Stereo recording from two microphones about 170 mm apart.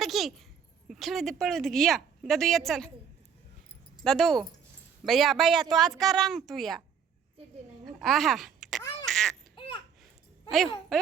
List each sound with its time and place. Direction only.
0.0 s a child's voice: centre (ahead or behind)
4.0 s a woman's voice: centre (ahead or behind)
7.9 s a sound: centre (ahead or behind)
8.8 s quack: 25° left (ahead or behind)
9.0 s baby laughter: 5° left (ahead or behind)
9.6 s babbling: 30° left (ahead or behind)
10.5 s a woman's voice: centre (ahead or behind)